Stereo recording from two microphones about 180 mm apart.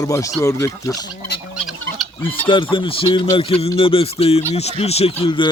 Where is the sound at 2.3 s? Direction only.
30° left (ahead or behind).